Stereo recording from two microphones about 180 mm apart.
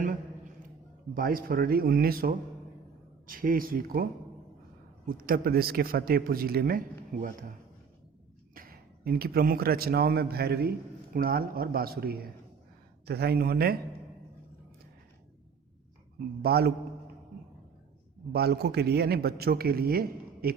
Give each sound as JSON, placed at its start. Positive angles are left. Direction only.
{"t": 1.1, "sound": "a man's voice", "side_deg": -55}
{"t": 5.0, "sound": "a man's voice", "side_deg": -55}
{"t": 8.5, "sound": "a man's voice", "side_deg": -55}
{"t": 16.1, "sound": "a man's voice", "side_deg": -60}
{"t": 18.3, "sound": "a man's voice", "side_deg": -60}